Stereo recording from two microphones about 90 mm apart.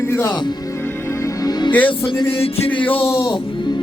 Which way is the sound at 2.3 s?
90° left.